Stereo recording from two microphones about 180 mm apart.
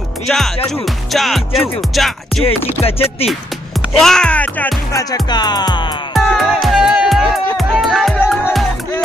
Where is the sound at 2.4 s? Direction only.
30° left (ahead or behind).